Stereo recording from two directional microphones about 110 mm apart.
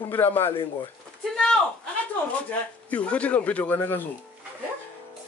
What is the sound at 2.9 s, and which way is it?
A man's voice, 10° left (ahead or behind).